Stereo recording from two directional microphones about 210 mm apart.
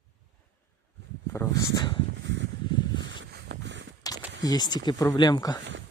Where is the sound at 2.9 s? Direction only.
60° right (ahead or behind).